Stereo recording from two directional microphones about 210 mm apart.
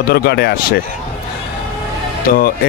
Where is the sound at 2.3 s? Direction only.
45° left (ahead or behind).